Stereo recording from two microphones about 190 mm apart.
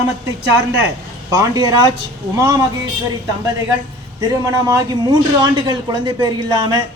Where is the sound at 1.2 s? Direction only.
20° right (ahead or behind).